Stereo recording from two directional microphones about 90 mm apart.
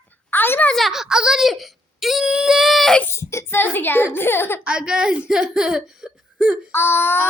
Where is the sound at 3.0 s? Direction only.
30° left (ahead or behind).